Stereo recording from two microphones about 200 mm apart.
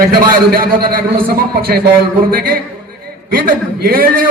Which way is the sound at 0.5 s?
50° right (ahead or behind).